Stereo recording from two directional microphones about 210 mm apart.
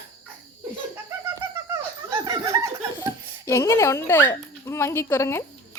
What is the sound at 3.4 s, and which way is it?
Speech, 15° left (ahead or behind).